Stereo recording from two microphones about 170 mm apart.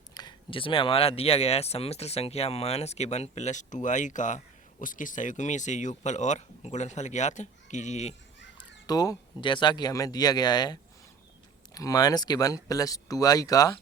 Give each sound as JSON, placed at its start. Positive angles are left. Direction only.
{"t": 0.1, "sound": "speech", "side_deg": 25}
{"t": 8.5, "sound": "speech", "side_deg": 20}